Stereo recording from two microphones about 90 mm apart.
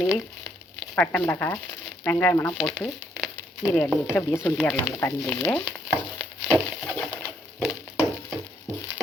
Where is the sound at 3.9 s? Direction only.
25° left (ahead or behind).